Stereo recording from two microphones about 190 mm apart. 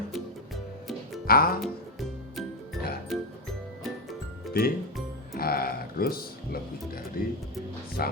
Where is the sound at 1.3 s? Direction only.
50° left (ahead or behind).